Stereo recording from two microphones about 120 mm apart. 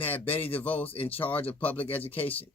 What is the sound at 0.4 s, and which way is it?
Speech, 15° left (ahead or behind).